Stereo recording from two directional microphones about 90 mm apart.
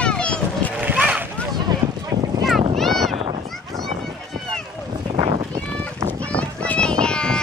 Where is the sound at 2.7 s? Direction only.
Centre (ahead or behind).